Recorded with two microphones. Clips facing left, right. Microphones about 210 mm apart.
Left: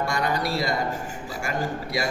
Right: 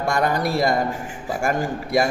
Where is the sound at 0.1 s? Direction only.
50° right (ahead or behind).